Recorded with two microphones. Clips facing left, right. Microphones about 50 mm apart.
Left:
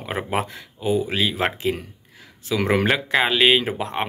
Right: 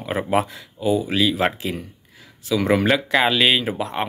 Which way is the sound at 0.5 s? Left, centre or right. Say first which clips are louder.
Right 1 dB; left.